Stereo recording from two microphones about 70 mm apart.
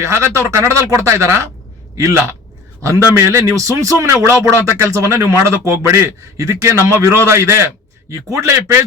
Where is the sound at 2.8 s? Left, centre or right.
Right.